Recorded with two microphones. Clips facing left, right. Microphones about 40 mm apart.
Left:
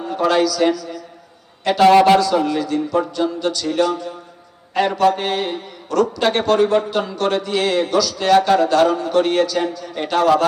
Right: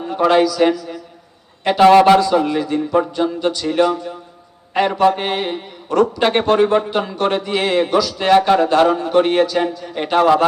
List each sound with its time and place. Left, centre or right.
0.1 s a man's voice: right